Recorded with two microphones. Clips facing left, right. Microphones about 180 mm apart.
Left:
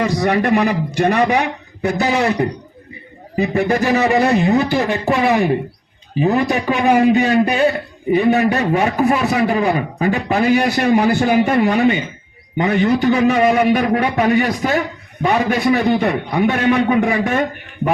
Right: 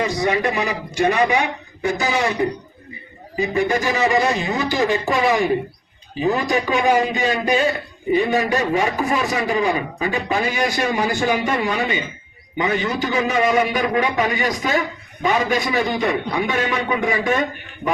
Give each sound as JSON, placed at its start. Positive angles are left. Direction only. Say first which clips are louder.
{"t": 0.0, "sound": "a man's voice", "louder": "left 3 dB", "side_deg": 60}
{"t": 13.7, "sound": "a man's voice", "louder": "left 5 dB", "side_deg": 50}